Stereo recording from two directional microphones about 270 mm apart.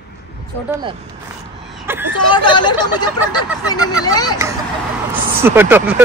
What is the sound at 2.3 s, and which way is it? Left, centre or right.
Speech, centre.